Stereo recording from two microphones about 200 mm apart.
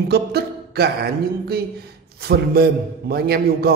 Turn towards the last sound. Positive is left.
turn(degrees=-50)  # may be behind; listen again after turning